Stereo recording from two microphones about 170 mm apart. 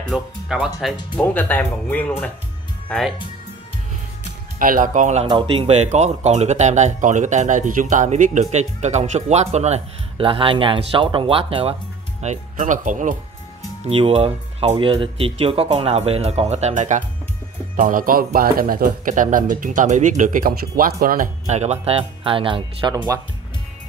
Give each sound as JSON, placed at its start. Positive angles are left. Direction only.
{"t": 0.1, "sound": "speech", "side_deg": 0}
{"t": 4.6, "sound": "speech", "side_deg": -55}
{"t": 12.2, "sound": "speech", "side_deg": -45}
{"t": 13.8, "sound": "speech", "side_deg": -35}
{"t": 21.5, "sound": "speech", "side_deg": -40}
{"t": 22.9, "sound": "speech", "side_deg": -20}